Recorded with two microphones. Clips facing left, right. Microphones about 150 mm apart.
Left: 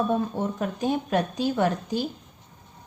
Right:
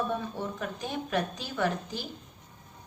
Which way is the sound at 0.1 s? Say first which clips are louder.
Left 7 dB; 45° left (ahead or behind).